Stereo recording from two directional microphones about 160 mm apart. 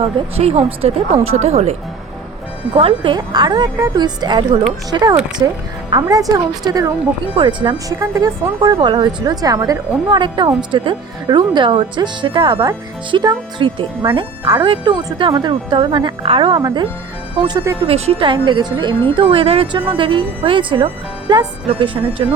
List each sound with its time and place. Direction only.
0.0 s speech: 35° right (ahead or behind)
2.7 s speech: 35° right (ahead or behind)
16.6 s speech: 20° right (ahead or behind)
17.8 s speech: 40° right (ahead or behind)